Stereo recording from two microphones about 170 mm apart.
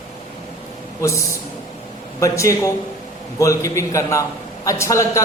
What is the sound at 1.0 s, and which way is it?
A man's voice, 15° left (ahead or behind).